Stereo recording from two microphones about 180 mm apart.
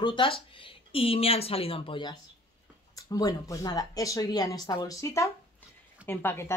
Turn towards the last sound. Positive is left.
turn(degrees=15)  # may be behind; listen again after turning